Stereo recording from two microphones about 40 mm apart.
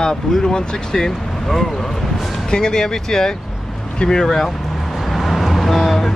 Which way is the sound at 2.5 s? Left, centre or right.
Centre.